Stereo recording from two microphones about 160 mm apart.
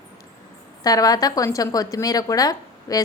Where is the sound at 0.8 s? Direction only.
25° left (ahead or behind).